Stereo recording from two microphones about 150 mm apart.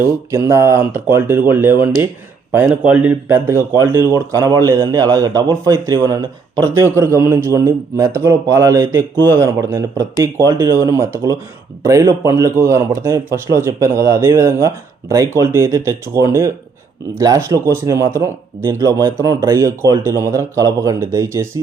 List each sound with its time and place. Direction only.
0.3 s speech: 20° right (ahead or behind)